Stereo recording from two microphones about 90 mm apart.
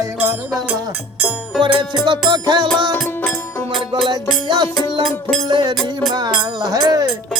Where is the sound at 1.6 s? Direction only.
60° right (ahead or behind).